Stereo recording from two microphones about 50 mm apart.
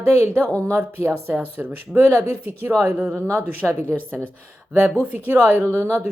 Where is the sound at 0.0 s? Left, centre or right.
Right.